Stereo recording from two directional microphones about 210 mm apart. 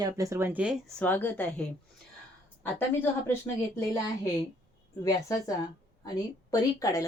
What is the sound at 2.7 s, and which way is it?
Speech, 10° left (ahead or behind).